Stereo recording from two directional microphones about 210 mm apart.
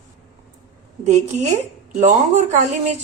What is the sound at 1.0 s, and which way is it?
Speech, 35° right (ahead or behind).